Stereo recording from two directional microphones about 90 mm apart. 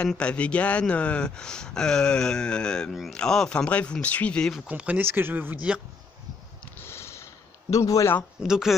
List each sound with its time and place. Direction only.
0.1 s speech: 10° left (ahead or behind)
2.9 s speech: centre (ahead or behind)
4.6 s speech: 15° right (ahead or behind)
6.8 s a sound: 30° left (ahead or behind)
7.7 s speech: 40° left (ahead or behind)
8.4 s speech: 5° right (ahead or behind)